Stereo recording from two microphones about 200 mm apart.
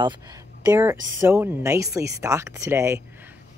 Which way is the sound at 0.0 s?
20° right (ahead or behind).